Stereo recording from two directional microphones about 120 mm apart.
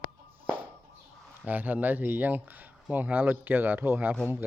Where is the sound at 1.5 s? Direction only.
15° right (ahead or behind).